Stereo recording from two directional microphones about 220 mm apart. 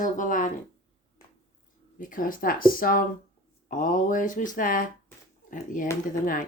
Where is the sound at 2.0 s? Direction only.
40° left (ahead or behind).